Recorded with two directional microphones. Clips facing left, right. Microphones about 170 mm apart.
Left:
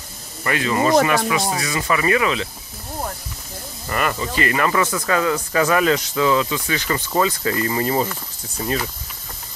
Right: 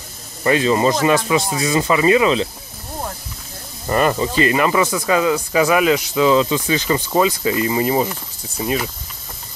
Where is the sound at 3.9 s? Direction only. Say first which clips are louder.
Right 6 dB; 30° right (ahead or behind).